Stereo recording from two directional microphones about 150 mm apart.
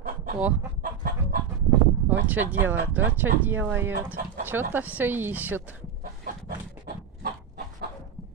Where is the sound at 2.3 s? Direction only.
10° right (ahead or behind).